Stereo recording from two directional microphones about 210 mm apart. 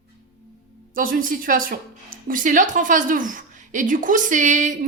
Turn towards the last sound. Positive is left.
turn(degrees=-35)  # may be behind; listen again after turning